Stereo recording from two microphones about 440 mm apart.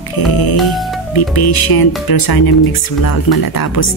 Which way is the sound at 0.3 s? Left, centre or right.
Left.